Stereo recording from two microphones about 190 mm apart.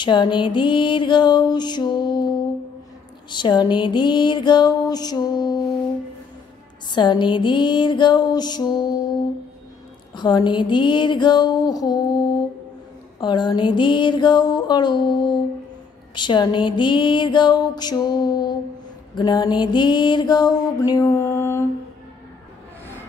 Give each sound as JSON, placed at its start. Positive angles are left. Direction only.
{"t": 0.0, "sound": "music", "side_deg": 25}
{"t": 3.3, "sound": "music", "side_deg": 25}
{"t": 6.9, "sound": "music", "side_deg": 25}
{"t": 10.1, "sound": "music", "side_deg": 25}
{"t": 19.1, "sound": "mantra", "side_deg": 20}